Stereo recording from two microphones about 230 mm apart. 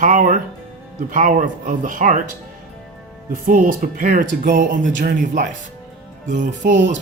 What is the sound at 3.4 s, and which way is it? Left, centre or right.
Speech, right.